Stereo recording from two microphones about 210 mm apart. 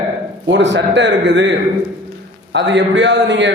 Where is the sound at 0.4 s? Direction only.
60° right (ahead or behind).